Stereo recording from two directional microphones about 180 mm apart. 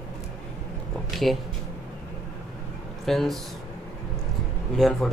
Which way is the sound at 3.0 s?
Centre (ahead or behind).